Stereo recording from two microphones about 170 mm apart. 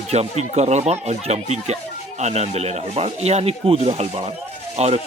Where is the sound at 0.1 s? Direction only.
40° right (ahead or behind).